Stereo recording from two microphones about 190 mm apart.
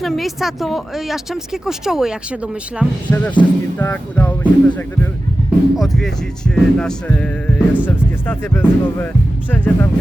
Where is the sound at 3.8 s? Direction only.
10° left (ahead or behind).